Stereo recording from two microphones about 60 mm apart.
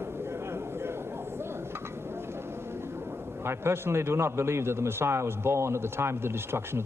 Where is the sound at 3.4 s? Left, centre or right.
Right.